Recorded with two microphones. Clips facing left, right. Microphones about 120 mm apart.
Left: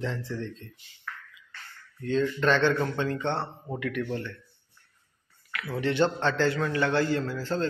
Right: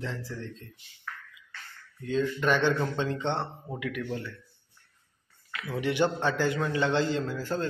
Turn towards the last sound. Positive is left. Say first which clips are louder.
# left 2 dB
turn(degrees=-15)  # may be behind; listen again after turning